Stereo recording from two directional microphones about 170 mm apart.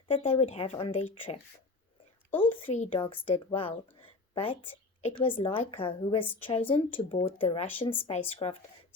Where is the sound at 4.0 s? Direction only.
30° left (ahead or behind).